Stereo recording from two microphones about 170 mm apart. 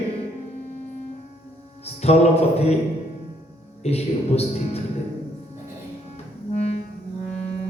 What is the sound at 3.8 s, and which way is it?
A man's voice, 35° left (ahead or behind).